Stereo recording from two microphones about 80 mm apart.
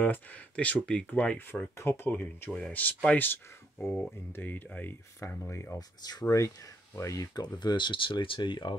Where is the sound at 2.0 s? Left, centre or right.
Left.